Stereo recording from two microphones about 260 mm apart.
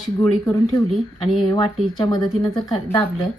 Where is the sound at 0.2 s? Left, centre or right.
Centre.